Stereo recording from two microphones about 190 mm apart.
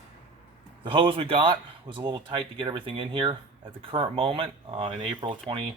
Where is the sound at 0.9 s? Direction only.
25° right (ahead or behind).